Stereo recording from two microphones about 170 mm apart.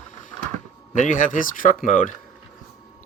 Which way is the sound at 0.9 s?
45° left (ahead or behind).